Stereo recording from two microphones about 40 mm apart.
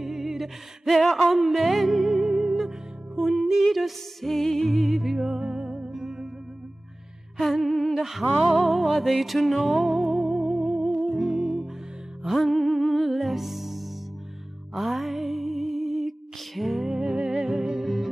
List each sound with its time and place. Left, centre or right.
0.0 s music: centre
3.7 s music: centre
4.7 s music: centre
7.7 s a sound: centre
8.0 s music: centre
12.4 s music: centre
17.0 s music: centre
17.8 s music: centre